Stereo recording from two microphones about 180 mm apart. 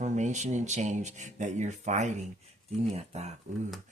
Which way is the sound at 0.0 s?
40° right (ahead or behind).